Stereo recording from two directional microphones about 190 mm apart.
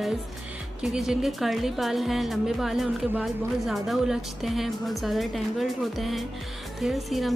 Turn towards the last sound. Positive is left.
turn(degrees=0)  # may be behind; listen again after turning